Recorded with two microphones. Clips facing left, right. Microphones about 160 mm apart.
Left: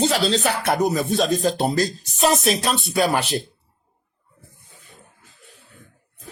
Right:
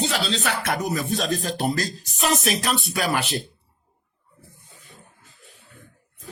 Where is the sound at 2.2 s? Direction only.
40° left (ahead or behind).